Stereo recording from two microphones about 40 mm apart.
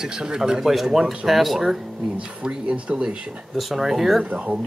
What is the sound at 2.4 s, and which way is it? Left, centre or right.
Speech, centre.